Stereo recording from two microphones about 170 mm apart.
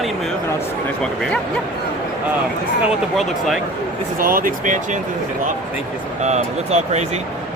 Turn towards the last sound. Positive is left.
turn(degrees=-40)  # may be behind; listen again after turning